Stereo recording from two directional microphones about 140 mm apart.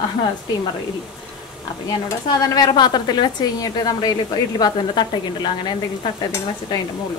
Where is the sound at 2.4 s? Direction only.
30° left (ahead or behind).